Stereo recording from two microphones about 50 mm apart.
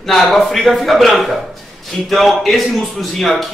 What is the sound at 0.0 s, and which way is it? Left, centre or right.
A man's voice, centre.